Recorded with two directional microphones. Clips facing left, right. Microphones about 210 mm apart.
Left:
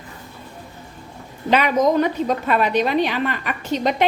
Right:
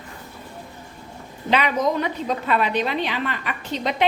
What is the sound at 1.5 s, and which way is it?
A woman's voice, 45° left (ahead or behind).